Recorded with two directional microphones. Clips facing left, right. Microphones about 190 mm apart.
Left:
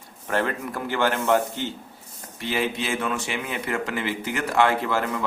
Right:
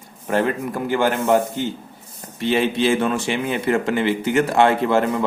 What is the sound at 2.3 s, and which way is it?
A man's voice, 25° right (ahead or behind).